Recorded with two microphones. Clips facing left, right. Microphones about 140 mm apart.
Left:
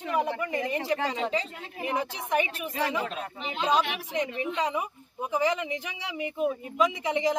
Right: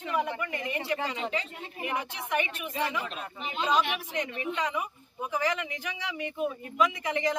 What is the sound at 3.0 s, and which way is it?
Speech, 90° left.